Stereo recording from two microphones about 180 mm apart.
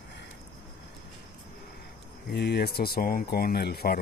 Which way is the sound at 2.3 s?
65° left (ahead or behind).